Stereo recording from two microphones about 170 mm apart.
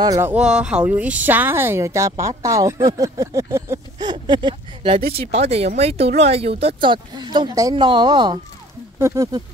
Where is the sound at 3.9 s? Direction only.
25° right (ahead or behind).